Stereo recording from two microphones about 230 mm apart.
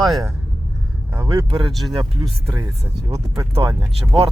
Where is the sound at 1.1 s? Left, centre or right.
Centre.